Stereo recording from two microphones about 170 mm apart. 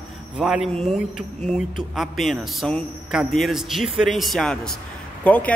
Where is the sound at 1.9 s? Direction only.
Centre (ahead or behind).